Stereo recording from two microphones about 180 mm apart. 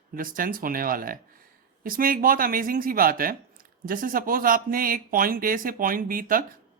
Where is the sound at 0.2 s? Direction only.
50° right (ahead or behind).